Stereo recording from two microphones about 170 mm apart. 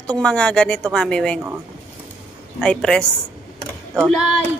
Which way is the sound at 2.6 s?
5° left (ahead or behind).